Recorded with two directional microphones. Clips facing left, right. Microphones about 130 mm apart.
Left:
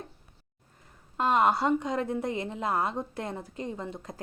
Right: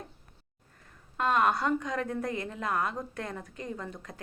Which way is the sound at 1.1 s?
25° left (ahead or behind).